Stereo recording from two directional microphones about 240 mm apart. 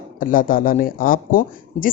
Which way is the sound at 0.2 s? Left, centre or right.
Left.